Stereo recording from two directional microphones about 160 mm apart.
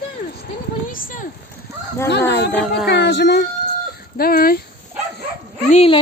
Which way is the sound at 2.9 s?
90° left.